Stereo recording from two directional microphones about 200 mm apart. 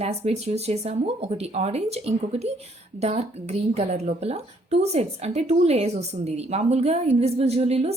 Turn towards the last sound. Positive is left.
turn(degrees=-30)  # may be behind; listen again after turning